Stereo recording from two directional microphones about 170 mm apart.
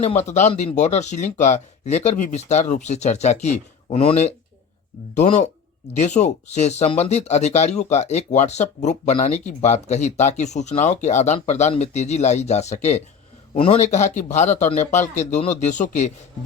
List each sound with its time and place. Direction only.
0.0 s speech: 40° left (ahead or behind)